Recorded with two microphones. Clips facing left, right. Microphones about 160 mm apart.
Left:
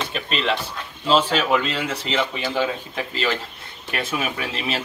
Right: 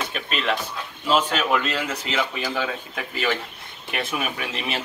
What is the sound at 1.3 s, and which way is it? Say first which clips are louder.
Speech: left 2 dB; centre (ahead or behind).